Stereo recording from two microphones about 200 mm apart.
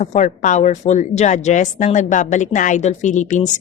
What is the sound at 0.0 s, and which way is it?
Speech, 35° left (ahead or behind).